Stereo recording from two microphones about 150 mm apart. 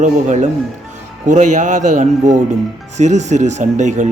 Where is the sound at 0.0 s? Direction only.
55° right (ahead or behind).